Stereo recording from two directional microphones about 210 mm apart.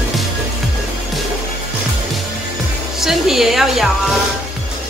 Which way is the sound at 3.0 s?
Centre (ahead or behind).